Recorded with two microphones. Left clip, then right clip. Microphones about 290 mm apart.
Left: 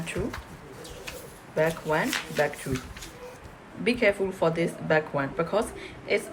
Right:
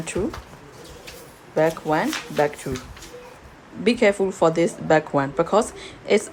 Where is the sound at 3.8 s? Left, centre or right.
Centre.